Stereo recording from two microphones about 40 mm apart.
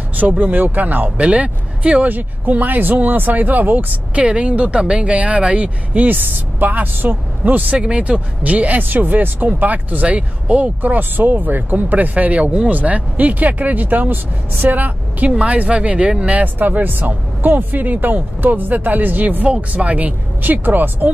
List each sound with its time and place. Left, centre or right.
0.1 s speech: right
1.2 s speech: right
2.0 s speech: right
4.1 s speech: right
6.0 s speech: right
7.7 s speech: right
15.2 s speech: right
16.3 s speech: right
19.4 s speech: right
20.5 s speech: right